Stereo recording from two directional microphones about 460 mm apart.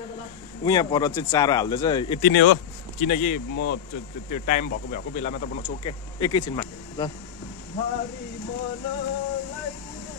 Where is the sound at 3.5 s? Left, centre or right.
Left.